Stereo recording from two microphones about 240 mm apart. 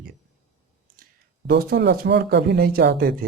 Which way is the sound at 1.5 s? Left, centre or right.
Right.